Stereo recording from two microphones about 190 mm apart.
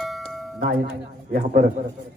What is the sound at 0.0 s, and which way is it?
Music, centre (ahead or behind).